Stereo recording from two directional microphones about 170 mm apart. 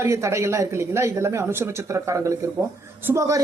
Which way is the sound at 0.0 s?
15° right (ahead or behind).